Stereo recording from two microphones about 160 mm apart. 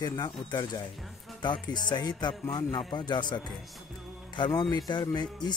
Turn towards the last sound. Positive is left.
turn(degrees=25)  # may be behind; listen again after turning